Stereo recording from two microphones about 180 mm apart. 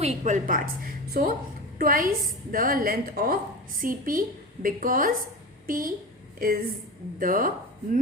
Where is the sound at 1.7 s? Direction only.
50° right (ahead or behind).